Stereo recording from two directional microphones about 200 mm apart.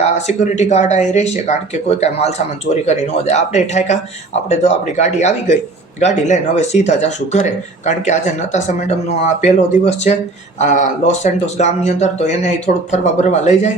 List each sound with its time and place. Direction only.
0.3 s speech: 35° left (ahead or behind)